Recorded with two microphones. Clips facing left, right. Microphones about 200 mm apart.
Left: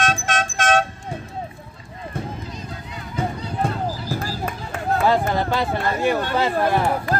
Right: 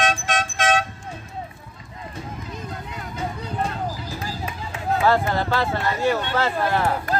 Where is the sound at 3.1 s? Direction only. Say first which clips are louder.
Left 3 dB; 55° left (ahead or behind).